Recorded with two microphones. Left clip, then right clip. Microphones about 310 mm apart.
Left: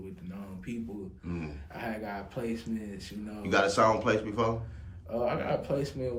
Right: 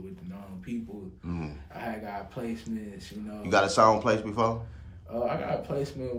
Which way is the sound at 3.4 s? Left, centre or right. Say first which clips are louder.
Right 3 dB; centre.